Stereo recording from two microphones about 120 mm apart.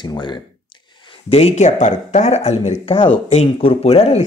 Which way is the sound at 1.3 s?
60° left (ahead or behind).